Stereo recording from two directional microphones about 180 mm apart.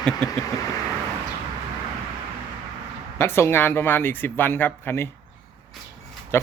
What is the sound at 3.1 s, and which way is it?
Speech, 15° left (ahead or behind).